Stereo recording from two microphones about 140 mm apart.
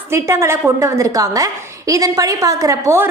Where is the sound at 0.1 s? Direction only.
20° right (ahead or behind).